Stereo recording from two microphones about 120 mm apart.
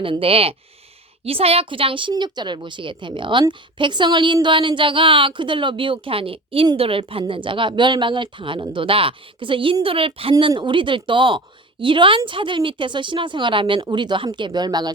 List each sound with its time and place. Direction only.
0.0 s speech: 50° right (ahead or behind)